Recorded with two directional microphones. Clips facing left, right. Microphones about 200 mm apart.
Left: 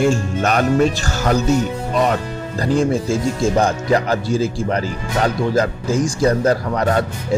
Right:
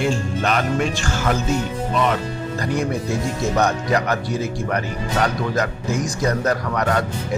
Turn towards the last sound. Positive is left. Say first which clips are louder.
# left 3 dB
turn(degrees=30)  # may be behind; listen again after turning